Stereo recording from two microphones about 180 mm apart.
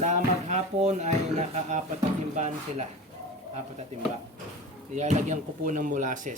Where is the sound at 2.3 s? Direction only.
40° right (ahead or behind).